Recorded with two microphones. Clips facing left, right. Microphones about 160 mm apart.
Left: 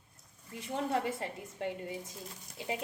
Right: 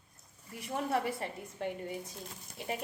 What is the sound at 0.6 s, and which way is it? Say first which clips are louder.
A woman's voice: even; 25° left (ahead or behind).